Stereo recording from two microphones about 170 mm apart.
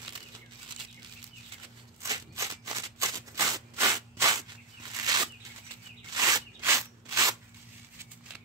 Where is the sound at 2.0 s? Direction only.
20° right (ahead or behind).